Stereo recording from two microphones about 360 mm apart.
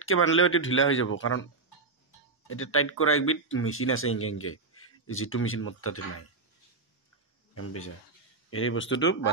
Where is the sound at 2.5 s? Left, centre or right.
Left.